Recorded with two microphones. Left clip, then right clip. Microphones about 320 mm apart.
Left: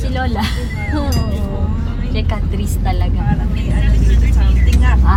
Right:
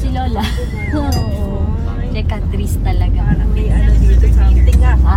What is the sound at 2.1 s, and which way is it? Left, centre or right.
Speech, centre.